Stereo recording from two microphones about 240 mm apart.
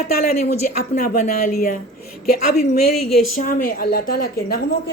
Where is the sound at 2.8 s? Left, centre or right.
Left.